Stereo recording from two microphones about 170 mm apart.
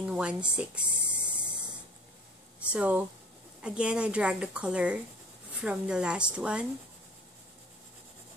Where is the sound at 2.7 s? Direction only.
10° right (ahead or behind).